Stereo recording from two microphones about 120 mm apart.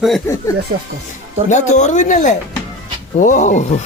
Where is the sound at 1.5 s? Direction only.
85° left.